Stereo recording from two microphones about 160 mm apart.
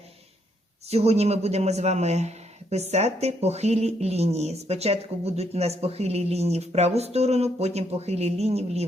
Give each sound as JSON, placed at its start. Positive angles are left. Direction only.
{"t": 0.9, "sound": "a man's voice", "side_deg": -40}